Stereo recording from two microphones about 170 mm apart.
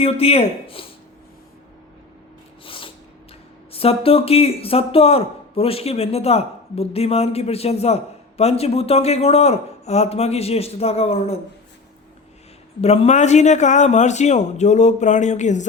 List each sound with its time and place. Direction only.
0.0 s a man's voice: 35° left (ahead or behind)
2.6 s a sound: 30° left (ahead or behind)
3.7 s a man's voice: 35° left (ahead or behind)
12.8 s a man's voice: 40° left (ahead or behind)